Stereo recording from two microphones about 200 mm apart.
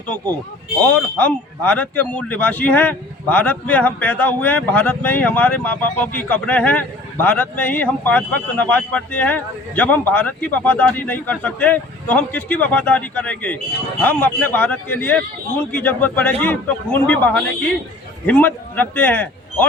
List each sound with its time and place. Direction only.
0.8 s a man's voice: 10° left (ahead or behind)